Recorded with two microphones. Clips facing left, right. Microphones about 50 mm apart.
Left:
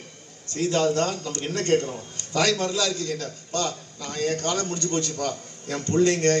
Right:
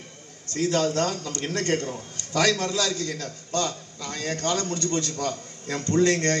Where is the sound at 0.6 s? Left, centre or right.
Left.